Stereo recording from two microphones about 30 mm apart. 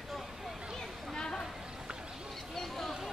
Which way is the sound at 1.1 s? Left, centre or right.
Left.